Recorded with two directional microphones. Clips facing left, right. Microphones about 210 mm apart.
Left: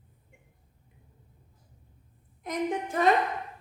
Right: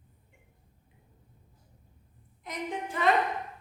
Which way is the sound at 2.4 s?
45° left (ahead or behind).